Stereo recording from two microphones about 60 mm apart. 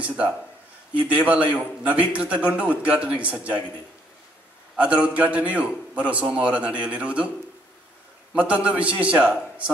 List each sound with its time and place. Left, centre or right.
0.9 s a man's voice: right
4.7 s a man's voice: right
8.6 s a man's voice: right